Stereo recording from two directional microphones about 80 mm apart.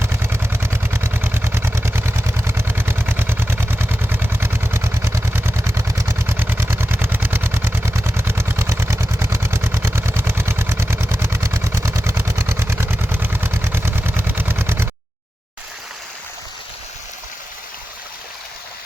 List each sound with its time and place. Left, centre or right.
0.0 s vehicle: right